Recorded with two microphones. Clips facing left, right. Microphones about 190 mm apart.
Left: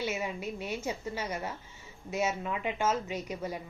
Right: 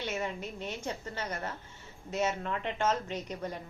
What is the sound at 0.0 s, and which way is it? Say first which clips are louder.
A woman's voice: left 2 dB; 10° left (ahead or behind).